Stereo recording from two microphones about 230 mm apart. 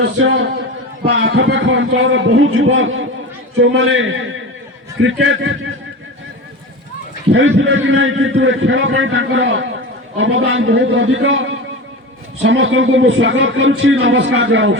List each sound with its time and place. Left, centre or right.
0.0 s a man's voice: right
5.2 s a man's voice: right
7.3 s a man's voice: right